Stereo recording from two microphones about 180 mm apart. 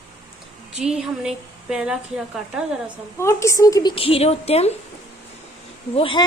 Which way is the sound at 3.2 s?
15° left (ahead or behind).